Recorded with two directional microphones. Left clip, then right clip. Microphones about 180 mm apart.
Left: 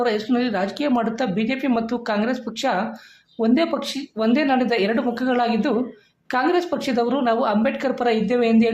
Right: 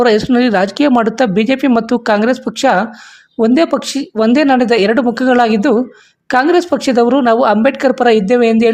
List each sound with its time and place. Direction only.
0.0 s speech: 45° right (ahead or behind)